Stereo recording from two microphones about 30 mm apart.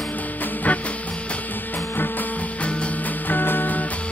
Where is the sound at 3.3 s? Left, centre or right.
Left.